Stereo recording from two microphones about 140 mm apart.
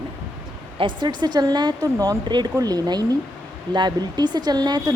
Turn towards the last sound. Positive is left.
turn(degrees=-30)  # may be behind; listen again after turning